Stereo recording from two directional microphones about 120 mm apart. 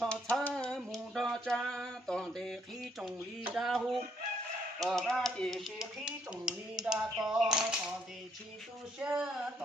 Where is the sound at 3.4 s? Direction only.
5° right (ahead or behind).